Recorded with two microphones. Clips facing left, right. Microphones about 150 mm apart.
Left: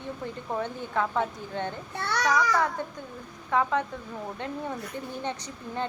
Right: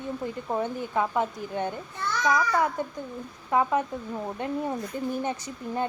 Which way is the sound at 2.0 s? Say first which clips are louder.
Left 2 dB; 70° left (ahead or behind).